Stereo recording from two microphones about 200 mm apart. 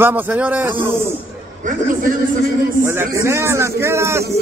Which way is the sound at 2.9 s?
15° right (ahead or behind).